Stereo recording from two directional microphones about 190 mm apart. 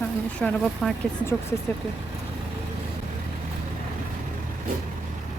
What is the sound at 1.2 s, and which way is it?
Speech, 15° left (ahead or behind).